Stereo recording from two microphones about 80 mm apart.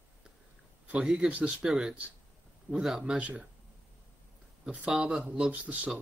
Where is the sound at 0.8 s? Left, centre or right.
Centre.